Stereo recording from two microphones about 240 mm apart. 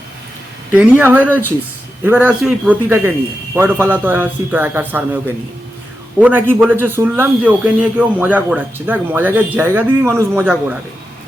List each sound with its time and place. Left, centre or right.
0.7 s a man's voice: centre